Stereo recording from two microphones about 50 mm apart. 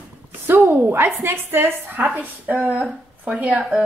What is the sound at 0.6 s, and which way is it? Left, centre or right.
Speech, right.